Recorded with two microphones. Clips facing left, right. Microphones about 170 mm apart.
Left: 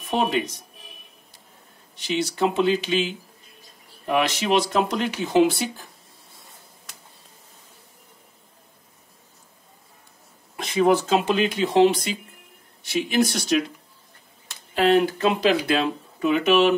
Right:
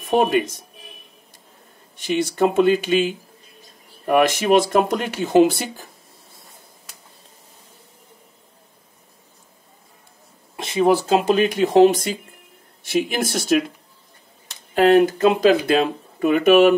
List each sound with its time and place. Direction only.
0.0 s speech: 50° right (ahead or behind)
2.0 s speech: 50° right (ahead or behind)
10.5 s speech: 25° right (ahead or behind); by 13.7 s 50° right (ahead or behind)
14.7 s speech: 50° right (ahead or behind)